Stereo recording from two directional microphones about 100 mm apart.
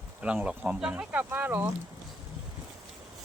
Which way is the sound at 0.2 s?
10° right (ahead or behind).